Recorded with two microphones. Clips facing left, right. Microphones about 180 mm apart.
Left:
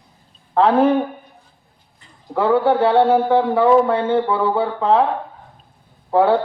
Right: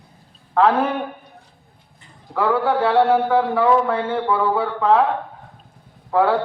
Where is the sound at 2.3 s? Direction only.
25° left (ahead or behind).